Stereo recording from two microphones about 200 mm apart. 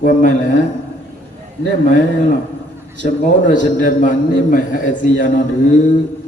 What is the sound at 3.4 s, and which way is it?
A man's voice, 40° left (ahead or behind).